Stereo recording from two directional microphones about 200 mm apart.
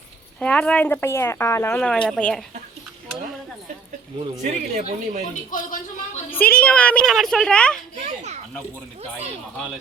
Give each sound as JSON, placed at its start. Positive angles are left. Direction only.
{"t": 0.3, "sound": "speech", "side_deg": 5}
{"t": 4.7, "sound": "speech", "side_deg": -40}
{"t": 5.3, "sound": "a sound", "side_deg": 40}
{"t": 6.4, "sound": "a woman's voice", "side_deg": 10}